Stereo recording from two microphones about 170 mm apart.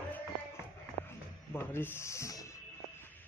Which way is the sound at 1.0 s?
15° left (ahead or behind).